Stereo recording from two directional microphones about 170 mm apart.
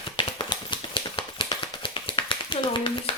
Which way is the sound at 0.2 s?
30° left (ahead or behind).